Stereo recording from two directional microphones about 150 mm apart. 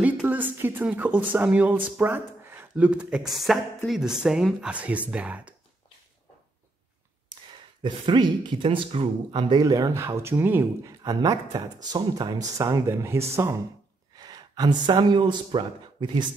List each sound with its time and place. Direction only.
0.0 s a woman's voice: 10° right (ahead or behind)
7.8 s speech: 30° right (ahead or behind)
14.1 s speech: 25° right (ahead or behind)